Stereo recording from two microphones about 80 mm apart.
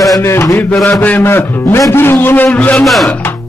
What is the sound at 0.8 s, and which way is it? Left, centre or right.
A man's voice, centre.